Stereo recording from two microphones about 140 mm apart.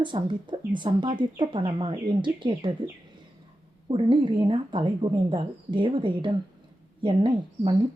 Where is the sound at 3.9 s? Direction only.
35° right (ahead or behind).